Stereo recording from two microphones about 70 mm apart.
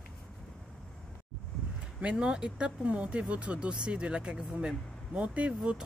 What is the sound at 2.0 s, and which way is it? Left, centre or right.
Speech, centre.